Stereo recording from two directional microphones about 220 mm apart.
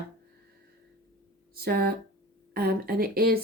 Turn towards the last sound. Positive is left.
turn(degrees=-45)  # may be behind; listen again after turning